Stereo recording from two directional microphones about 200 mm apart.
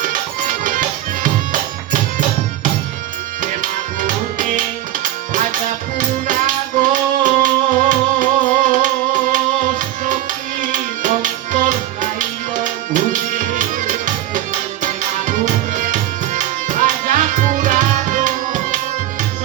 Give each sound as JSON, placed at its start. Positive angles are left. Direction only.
{"t": 0.0, "sound": "music", "side_deg": -40}
{"t": 3.4, "sound": "music", "side_deg": -40}
{"t": 6.0, "sound": "music", "side_deg": -40}